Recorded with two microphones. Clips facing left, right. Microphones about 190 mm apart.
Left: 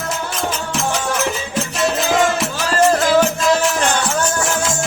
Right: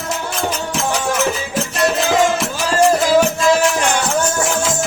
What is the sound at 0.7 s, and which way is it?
Music, centre (ahead or behind).